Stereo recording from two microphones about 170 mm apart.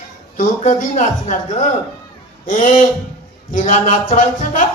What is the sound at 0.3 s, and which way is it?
Speech, 50° left (ahead or behind).